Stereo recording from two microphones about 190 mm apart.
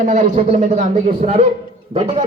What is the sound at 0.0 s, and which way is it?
A man's voice, 40° right (ahead or behind).